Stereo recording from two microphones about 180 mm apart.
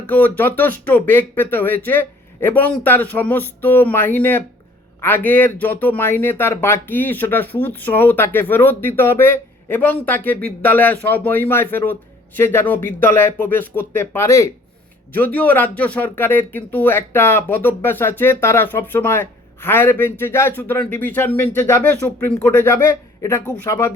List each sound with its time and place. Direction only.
0.1 s speech: 10° left (ahead or behind)